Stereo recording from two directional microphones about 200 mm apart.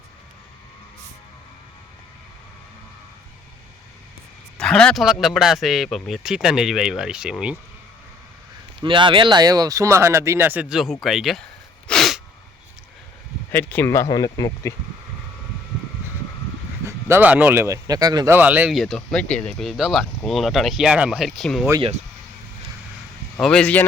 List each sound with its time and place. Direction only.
4.5 s speech: 5° left (ahead or behind)
8.8 s speech: 25° right (ahead or behind); by 11.4 s centre (ahead or behind)
11.9 s sneeze: centre (ahead or behind)
13.5 s speech: 10° left (ahead or behind)
16.8 s speech: 10° right (ahead or behind)
18.3 s speech: 10° right (ahead or behind)
23.4 s speech: 5° left (ahead or behind)